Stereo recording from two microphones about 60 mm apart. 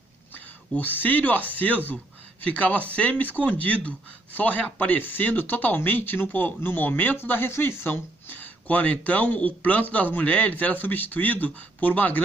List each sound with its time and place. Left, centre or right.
0.3 s speech: left